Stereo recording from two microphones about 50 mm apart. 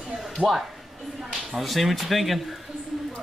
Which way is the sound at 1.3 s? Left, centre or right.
Centre.